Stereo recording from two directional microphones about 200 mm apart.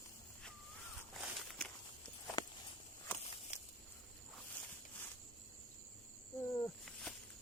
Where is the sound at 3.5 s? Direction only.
35° left (ahead or behind).